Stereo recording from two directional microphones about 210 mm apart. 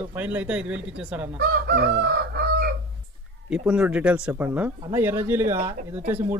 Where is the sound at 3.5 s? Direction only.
5° right (ahead or behind).